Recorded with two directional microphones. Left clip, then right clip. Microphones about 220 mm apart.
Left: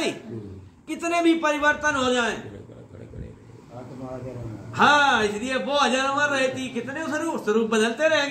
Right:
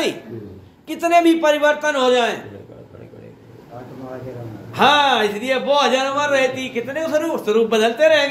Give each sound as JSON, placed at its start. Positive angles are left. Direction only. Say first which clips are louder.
{"t": 0.8, "sound": "speech", "louder": "right 7 dB", "side_deg": 25}
{"t": 4.7, "sound": "speech", "louder": "right 4 dB", "side_deg": 25}